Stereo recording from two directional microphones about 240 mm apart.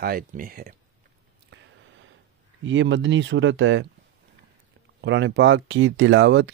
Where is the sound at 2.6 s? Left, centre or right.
Right.